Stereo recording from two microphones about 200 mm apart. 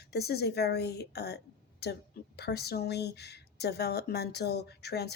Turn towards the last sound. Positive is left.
turn(degrees=55)  # may be behind; listen again after turning